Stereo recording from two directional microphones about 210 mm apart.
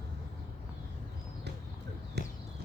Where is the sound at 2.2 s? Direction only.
55° right (ahead or behind).